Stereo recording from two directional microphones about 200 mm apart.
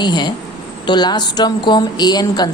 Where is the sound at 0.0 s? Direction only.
20° left (ahead or behind).